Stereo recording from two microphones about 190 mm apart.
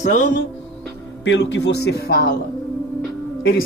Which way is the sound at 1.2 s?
70° left (ahead or behind).